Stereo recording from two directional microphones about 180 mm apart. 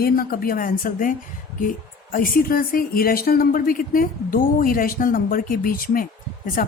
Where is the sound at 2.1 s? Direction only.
50° left (ahead or behind).